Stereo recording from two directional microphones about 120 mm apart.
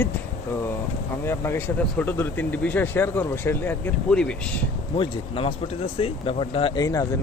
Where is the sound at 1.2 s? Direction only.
20° left (ahead or behind).